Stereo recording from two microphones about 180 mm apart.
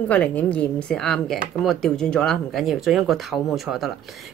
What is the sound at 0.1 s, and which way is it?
Speech, 5° left (ahead or behind).